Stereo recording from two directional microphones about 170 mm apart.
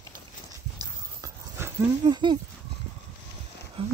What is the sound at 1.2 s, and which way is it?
Dog, 15° right (ahead or behind).